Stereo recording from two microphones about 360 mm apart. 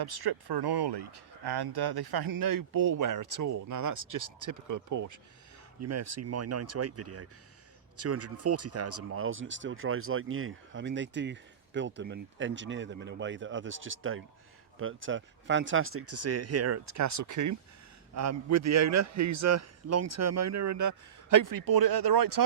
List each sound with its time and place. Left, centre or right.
0.0 s a man's voice: right